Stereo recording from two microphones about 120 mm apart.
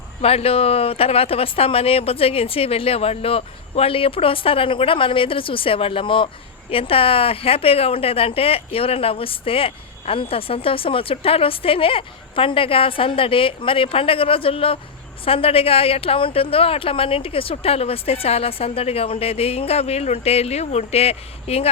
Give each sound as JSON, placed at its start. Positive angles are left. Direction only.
{"t": 0.2, "sound": "a woman's voice", "side_deg": 55}